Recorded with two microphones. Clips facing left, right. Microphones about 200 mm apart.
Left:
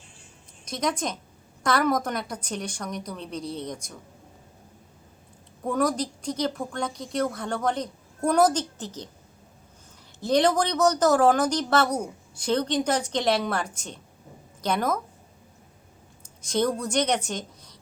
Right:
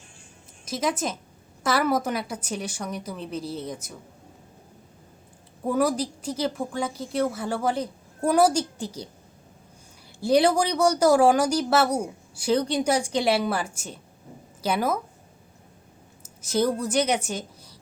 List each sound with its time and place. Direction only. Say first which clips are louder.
0.6 s a woman's voice: right 1 dB; 5° right (ahead or behind)
5.6 s speech: right 2 dB; 5° right (ahead or behind)
10.2 s a woman's voice: right 2 dB; 10° right (ahead or behind)
16.4 s a woman's voice: right 1 dB; 5° right (ahead or behind)